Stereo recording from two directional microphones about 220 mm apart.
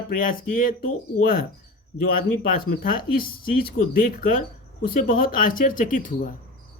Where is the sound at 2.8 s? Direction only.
40° left (ahead or behind).